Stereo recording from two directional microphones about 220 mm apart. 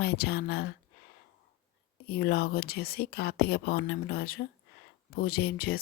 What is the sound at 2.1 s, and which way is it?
Speech, 45° left (ahead or behind).